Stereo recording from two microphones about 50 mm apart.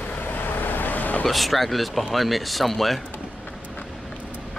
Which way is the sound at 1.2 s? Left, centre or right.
Centre.